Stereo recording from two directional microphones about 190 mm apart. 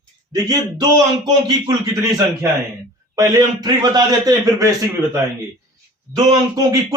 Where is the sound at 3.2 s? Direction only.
20° right (ahead or behind).